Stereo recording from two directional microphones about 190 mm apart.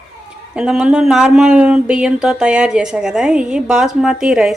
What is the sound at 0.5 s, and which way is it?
Speech, 5° right (ahead or behind).